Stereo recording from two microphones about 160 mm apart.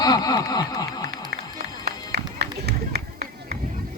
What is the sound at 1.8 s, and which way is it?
Music, 90° right.